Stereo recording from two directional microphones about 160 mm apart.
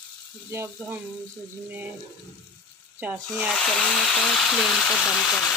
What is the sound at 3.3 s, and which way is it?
A woman's voice, centre (ahead or behind).